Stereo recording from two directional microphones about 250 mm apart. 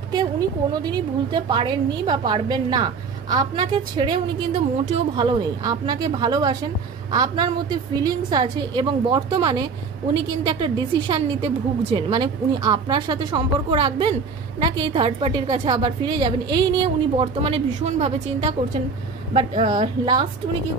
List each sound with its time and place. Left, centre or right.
0.1 s a woman's voice: centre